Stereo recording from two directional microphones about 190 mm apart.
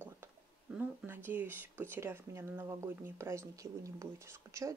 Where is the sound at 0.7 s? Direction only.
10° right (ahead or behind).